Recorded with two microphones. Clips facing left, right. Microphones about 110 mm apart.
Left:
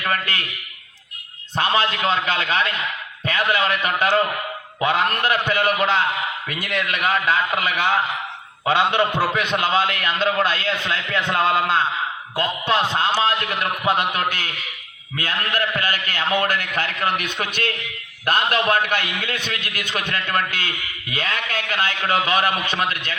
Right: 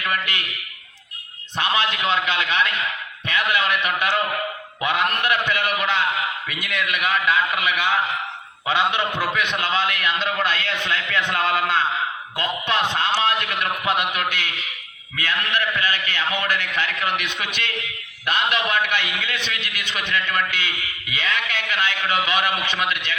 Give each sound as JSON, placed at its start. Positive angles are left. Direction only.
{"t": 0.0, "sound": "a man's voice", "side_deg": 35}
{"t": 1.5, "sound": "a man's voice", "side_deg": 35}